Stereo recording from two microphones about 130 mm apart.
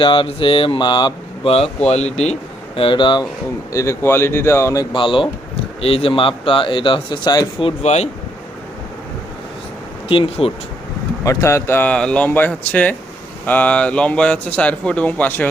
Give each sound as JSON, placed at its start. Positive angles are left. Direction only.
{"t": 0.0, "sound": "speech", "side_deg": 40}
{"t": 1.5, "sound": "speech", "side_deg": 50}
{"t": 2.7, "sound": "speech", "side_deg": 40}
{"t": 3.7, "sound": "speech", "side_deg": 25}
{"t": 4.9, "sound": "speech", "side_deg": 40}
{"t": 7.8, "sound": "speech", "side_deg": 55}
{"t": 10.1, "sound": "speech", "side_deg": 45}
{"t": 11.2, "sound": "speech", "side_deg": 25}